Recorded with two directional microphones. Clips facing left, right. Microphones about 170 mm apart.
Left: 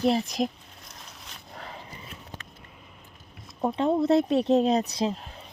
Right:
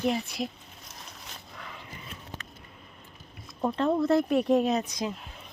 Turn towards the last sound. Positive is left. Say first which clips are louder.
# left 5 dB
turn(degrees=30)  # may be behind; listen again after turning